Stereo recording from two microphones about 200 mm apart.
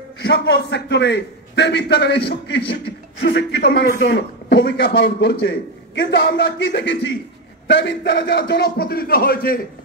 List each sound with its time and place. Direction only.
0.2 s a man's voice: 60° left (ahead or behind)